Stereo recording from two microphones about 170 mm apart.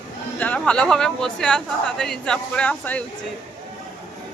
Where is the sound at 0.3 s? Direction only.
10° left (ahead or behind).